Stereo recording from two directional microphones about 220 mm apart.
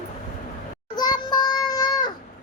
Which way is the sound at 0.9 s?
20° left (ahead or behind).